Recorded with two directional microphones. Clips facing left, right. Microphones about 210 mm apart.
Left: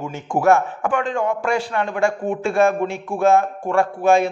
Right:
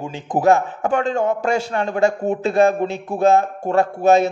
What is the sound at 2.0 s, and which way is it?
A man's voice, 20° right (ahead or behind).